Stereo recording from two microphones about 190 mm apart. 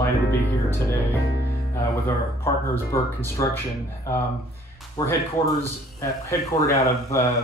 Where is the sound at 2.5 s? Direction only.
15° left (ahead or behind).